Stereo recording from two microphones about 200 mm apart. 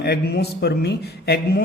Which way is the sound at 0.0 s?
55° left (ahead or behind).